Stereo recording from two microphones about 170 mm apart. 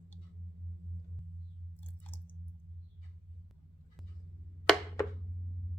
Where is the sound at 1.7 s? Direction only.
10° left (ahead or behind).